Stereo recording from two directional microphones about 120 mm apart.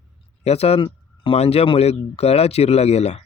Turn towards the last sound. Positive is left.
turn(degrees=65)  # may be behind; listen again after turning